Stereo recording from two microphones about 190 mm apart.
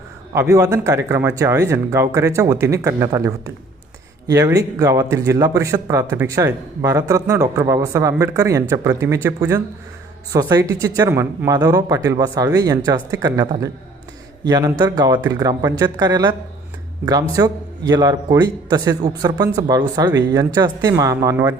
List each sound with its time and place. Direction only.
0.3 s speech: 15° right (ahead or behind)